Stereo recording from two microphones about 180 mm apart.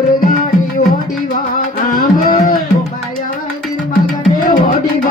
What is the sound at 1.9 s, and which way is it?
Tabla, 50° left (ahead or behind).